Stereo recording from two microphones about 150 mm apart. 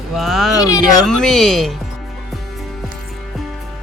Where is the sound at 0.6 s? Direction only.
25° left (ahead or behind).